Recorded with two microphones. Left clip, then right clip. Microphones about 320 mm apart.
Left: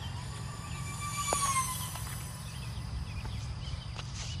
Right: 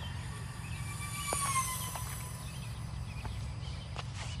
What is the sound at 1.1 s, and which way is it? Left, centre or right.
Music, centre.